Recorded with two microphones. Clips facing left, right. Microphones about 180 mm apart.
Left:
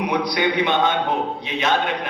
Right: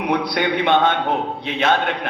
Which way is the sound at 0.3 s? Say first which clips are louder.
Right 2 dB; 60° right (ahead or behind).